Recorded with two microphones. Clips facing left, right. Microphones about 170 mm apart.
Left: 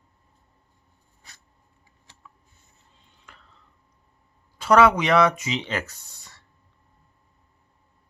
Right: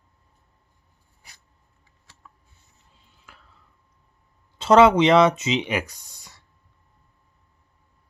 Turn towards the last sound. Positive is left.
turn(degrees=-10)  # may be behind; listen again after turning